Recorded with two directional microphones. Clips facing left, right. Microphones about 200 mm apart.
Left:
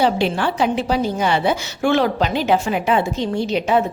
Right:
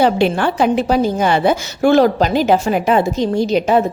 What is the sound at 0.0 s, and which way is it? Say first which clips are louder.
A woman's voice: right 4 dB; 50° right (ahead or behind).